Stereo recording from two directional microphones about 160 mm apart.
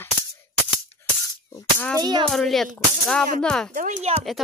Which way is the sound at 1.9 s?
25° right (ahead or behind).